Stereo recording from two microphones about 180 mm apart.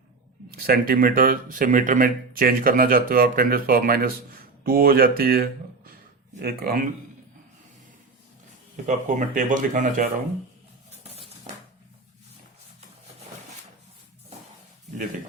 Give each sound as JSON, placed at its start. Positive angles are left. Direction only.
{"t": 0.5, "sound": "speech", "side_deg": -55}
{"t": 8.7, "sound": "speech", "side_deg": -45}